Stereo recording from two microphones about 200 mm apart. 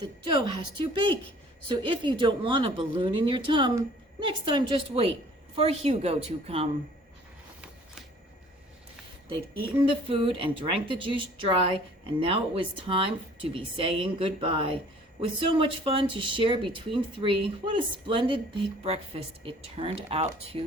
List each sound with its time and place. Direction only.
0.0 s speech: 25° right (ahead or behind)
9.6 s speech: 25° right (ahead or behind)